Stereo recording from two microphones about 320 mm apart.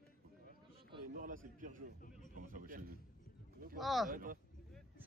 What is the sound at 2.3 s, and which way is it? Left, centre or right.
Speech, right.